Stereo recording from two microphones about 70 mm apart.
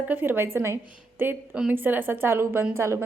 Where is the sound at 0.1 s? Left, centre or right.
Right.